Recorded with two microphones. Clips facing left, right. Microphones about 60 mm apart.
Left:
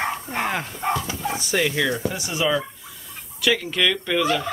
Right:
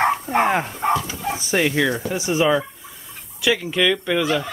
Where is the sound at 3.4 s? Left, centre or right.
Centre.